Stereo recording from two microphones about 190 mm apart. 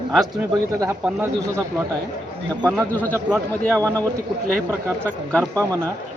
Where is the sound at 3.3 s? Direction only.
15° right (ahead or behind).